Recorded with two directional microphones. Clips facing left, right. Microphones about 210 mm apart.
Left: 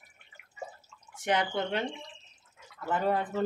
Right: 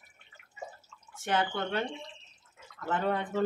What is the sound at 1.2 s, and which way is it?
Speech, 15° left (ahead or behind).